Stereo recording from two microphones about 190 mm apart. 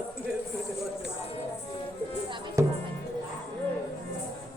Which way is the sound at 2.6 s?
15° right (ahead or behind).